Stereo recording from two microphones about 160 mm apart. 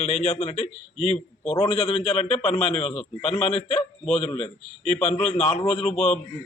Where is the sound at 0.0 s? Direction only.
45° left (ahead or behind).